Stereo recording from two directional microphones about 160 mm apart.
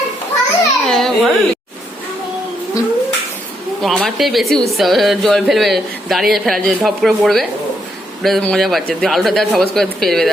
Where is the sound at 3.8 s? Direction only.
Centre (ahead or behind).